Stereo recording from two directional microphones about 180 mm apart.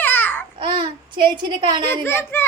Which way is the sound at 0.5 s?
30° right (ahead or behind).